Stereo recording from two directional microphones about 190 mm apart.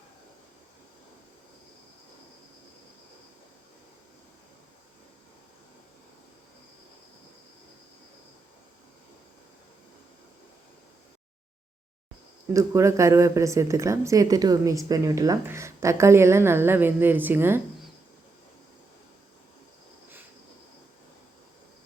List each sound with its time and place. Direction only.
12.5 s a woman's voice: 15° right (ahead or behind)